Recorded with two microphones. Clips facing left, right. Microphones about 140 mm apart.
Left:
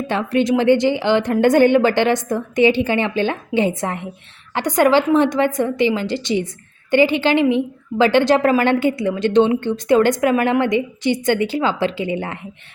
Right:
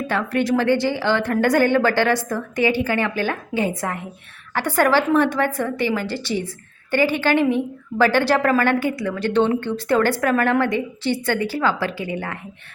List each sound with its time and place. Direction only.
0.1 s a woman's voice: 20° left (ahead or behind)